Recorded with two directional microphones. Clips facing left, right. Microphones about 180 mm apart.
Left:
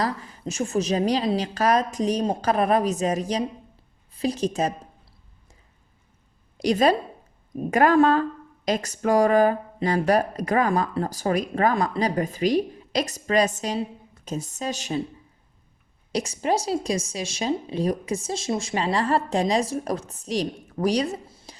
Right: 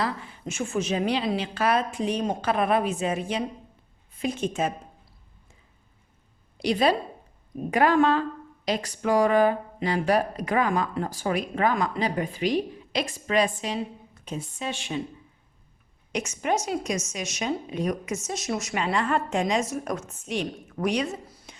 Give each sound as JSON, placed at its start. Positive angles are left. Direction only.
{"t": 0.0, "sound": "speech", "side_deg": 40}
{"t": 6.6, "sound": "speech", "side_deg": 45}
{"t": 16.1, "sound": "speech", "side_deg": 35}